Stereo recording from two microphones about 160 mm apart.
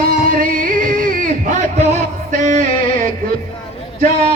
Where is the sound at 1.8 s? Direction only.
50° right (ahead or behind).